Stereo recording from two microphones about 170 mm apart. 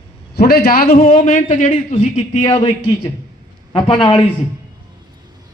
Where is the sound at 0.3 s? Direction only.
65° left (ahead or behind); by 2.4 s 45° left (ahead or behind).